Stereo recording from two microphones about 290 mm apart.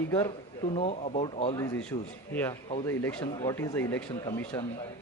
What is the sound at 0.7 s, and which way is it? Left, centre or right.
Speech, left.